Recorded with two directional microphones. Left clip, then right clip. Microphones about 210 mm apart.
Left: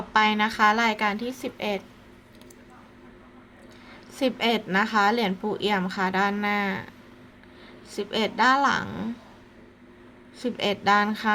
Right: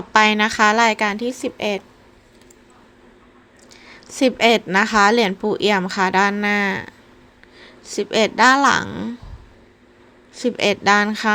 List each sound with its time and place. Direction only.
0.1 s speech: 35° right (ahead or behind)
4.1 s speech: 30° right (ahead or behind)
10.3 s speech: 30° right (ahead or behind)